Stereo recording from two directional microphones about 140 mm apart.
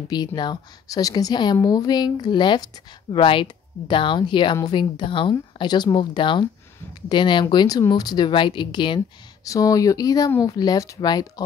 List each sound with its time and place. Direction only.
0.1 s a woman's voice: 30° left (ahead or behind)